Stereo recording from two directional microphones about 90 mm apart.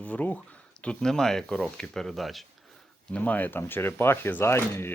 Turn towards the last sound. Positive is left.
turn(degrees=25)  # may be behind; listen again after turning